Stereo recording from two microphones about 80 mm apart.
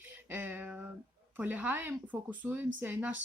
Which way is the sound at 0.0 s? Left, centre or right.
Right.